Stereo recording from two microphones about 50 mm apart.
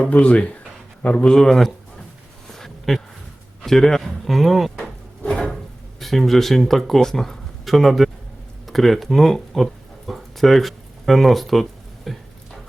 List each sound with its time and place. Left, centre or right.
0.1 s speech: left
1.4 s a man's voice: centre
2.5 s a sound: centre
3.6 s a man's voice: centre
5.2 s drawer open or close: centre
6.0 s speech: centre
8.6 s a sound: centre